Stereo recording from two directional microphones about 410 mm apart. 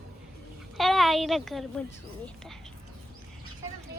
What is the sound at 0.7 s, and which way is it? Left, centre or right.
A child's voice, centre.